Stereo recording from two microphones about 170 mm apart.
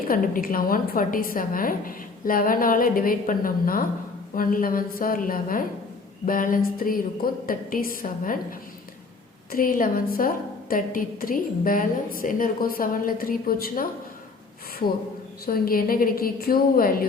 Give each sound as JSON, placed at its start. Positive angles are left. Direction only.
{"t": 0.1, "sound": "a woman's voice", "side_deg": 55}
{"t": 15.4, "sound": "a woman's voice", "side_deg": 60}